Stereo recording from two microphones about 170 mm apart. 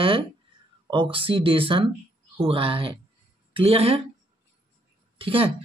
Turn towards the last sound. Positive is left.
turn(degrees=-30)  # may be behind; listen again after turning